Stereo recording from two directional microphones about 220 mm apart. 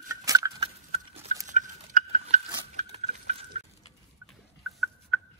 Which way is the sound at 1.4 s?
35° right (ahead or behind).